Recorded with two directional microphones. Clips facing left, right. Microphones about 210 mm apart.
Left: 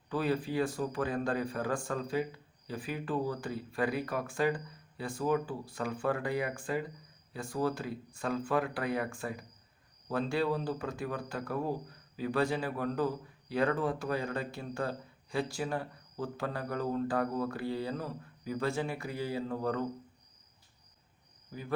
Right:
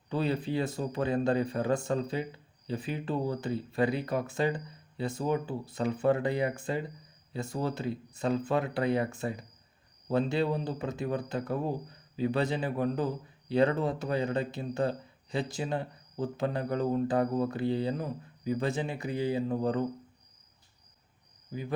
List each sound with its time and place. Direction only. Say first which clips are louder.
0.1 s a man's voice: right 2 dB; 25° right (ahead or behind)
21.5 s speech: right 6 dB; 15° right (ahead or behind)